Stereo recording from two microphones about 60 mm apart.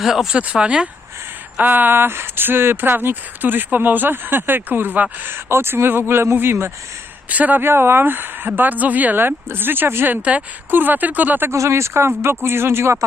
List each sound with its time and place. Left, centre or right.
0.0 s speech: centre
0.3 s speech: centre
1.6 s speech: right
5.2 s speech: right
7.3 s speech: right
7.6 s speech: right
11.5 s speech: right